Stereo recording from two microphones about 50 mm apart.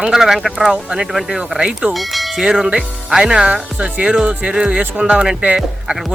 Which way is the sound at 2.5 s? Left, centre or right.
Centre.